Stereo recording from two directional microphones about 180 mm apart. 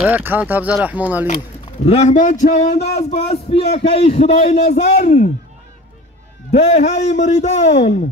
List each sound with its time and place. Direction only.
0.0 s speech: 10° right (ahead or behind)
1.9 s a man's voice: 40° left (ahead or behind)
6.5 s a man's voice: 35° left (ahead or behind)